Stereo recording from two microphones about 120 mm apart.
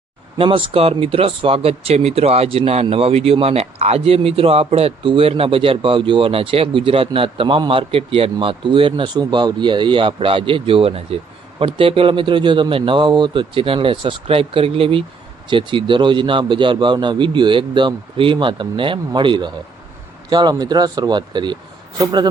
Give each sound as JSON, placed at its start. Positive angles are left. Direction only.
{"t": 0.3, "sound": "a man's voice", "side_deg": -45}